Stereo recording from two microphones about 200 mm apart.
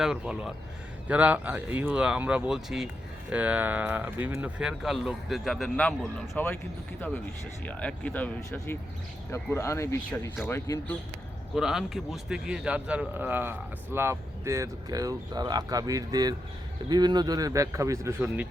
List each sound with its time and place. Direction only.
0.0 s a man's voice: 5° right (ahead or behind)
7.6 s speech: 5° left (ahead or behind)
11.5 s a man's voice: centre (ahead or behind)